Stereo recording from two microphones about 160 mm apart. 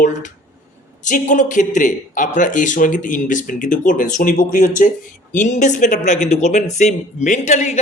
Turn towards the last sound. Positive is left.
turn(degrees=45)  # may be behind; listen again after turning